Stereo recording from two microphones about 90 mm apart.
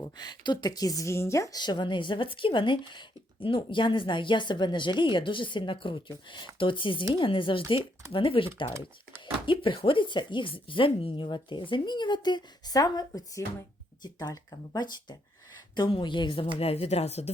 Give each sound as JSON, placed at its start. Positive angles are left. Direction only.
{"t": 0.0, "sound": "speech", "side_deg": 50}
{"t": 1.5, "sound": "a woman's voice", "side_deg": 55}
{"t": 16.6, "sound": "speech", "side_deg": 90}